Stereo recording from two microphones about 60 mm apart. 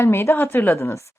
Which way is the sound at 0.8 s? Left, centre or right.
Left.